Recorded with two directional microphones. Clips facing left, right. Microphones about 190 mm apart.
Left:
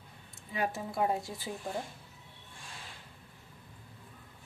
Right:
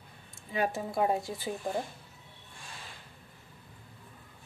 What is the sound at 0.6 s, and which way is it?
Speech, 25° right (ahead or behind).